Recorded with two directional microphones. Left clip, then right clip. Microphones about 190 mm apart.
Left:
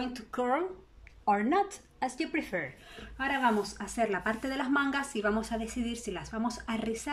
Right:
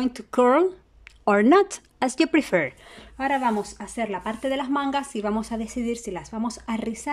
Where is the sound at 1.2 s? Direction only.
60° right (ahead or behind).